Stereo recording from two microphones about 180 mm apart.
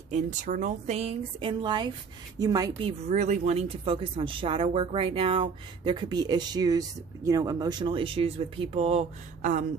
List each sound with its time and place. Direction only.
0.1 s speech: 40° right (ahead or behind); by 2.9 s 20° right (ahead or behind)
3.1 s speech: 40° right (ahead or behind)
9.4 s a sound: 45° right (ahead or behind)